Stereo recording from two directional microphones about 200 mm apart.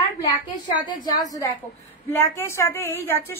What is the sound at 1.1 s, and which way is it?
A woman's voice, 20° left (ahead or behind).